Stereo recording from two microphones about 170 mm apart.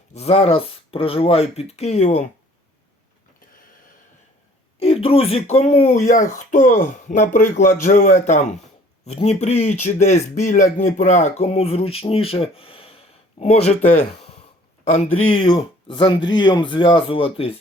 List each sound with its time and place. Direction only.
0.1 s speech: 40° left (ahead or behind)
4.8 s speech: 35° left (ahead or behind)